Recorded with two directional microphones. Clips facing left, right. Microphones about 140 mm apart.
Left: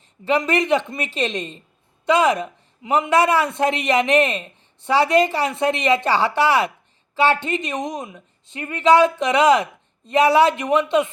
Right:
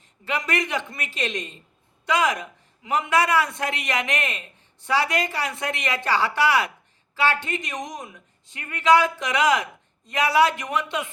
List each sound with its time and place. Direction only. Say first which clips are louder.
0.3 s a man's voice: left 8 dB; 25° left (ahead or behind)